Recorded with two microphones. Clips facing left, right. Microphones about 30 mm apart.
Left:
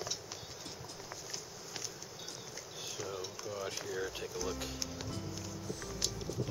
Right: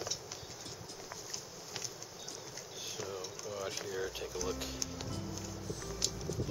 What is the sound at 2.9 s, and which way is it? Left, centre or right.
Speech, centre.